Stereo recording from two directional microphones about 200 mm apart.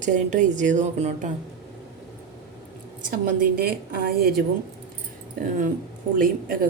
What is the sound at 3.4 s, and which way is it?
A woman's voice, 50° right (ahead or behind).